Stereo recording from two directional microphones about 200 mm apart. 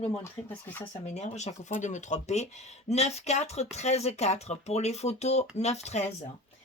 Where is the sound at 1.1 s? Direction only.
35° left (ahead or behind).